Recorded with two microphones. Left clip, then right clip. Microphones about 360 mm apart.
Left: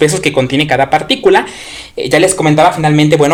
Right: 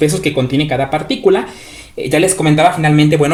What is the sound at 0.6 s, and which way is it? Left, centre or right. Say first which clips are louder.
Speech: left 6 dB; left.